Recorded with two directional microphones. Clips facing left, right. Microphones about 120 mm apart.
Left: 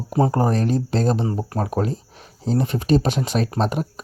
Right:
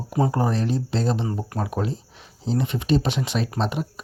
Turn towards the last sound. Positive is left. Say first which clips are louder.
# left 3 dB
turn(degrees=45)  # may be behind; listen again after turning